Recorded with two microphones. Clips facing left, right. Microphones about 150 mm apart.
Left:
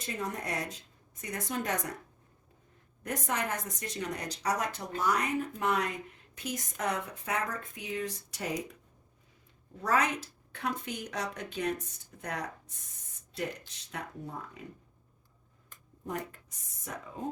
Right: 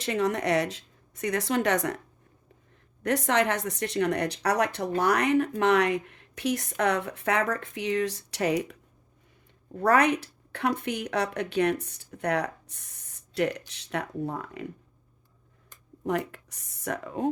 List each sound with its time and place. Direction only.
0.0 s speech: 80° right
3.0 s speech: 75° right (ahead or behind)
9.7 s speech: 65° right (ahead or behind)
16.0 s speech: 80° right